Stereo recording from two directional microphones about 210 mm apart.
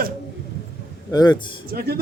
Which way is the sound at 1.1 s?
20° left (ahead or behind).